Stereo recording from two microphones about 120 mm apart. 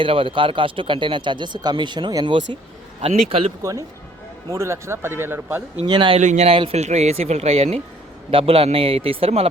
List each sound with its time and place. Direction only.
0.0 s speech: 45° right (ahead or behind)
3.0 s speech: 55° right (ahead or behind)
3.6 s speech: 25° right (ahead or behind)
5.8 s speech: 40° right (ahead or behind)
6.1 s speech: 70° right (ahead or behind); by 9.5 s 55° right (ahead or behind)